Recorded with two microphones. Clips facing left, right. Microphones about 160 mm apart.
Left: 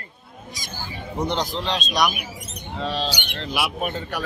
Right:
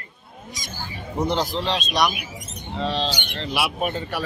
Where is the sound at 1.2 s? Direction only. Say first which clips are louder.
Right 2 dB; 5° right (ahead or behind).